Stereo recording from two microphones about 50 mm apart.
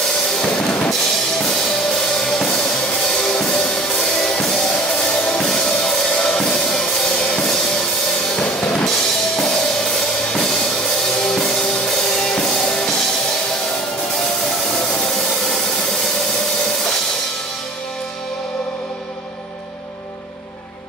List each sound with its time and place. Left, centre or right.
0.8 s drum kit: centre
4.9 s music: centre
8.3 s drum kit: centre
8.8 s drum kit: centre
11.8 s music: centre
15.2 s a sound: centre